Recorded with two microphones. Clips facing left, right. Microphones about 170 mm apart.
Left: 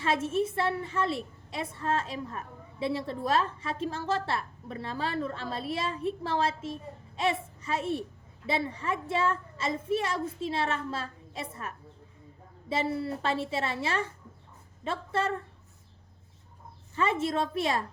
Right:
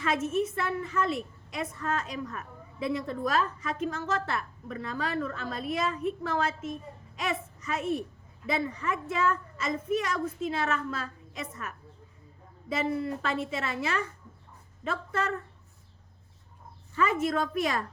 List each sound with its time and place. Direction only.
0.0 s a woman's voice: 30° left (ahead or behind)
16.9 s a woman's voice: 30° left (ahead or behind)